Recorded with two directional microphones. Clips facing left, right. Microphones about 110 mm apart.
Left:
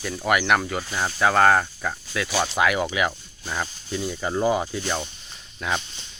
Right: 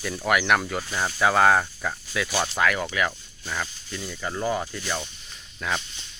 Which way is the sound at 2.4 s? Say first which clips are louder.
Left 4 dB; 15° left (ahead or behind).